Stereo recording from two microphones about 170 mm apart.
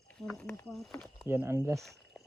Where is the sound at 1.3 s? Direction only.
15° right (ahead or behind).